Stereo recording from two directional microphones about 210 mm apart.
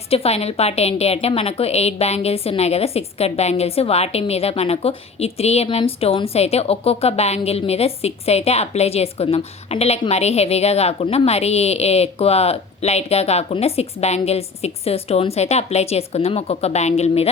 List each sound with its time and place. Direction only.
0.1 s a woman's voice: 30° left (ahead or behind)